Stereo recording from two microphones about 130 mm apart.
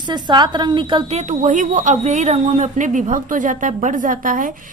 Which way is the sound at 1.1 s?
60° right (ahead or behind).